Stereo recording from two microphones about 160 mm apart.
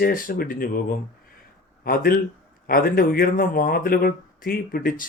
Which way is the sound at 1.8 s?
70° left (ahead or behind).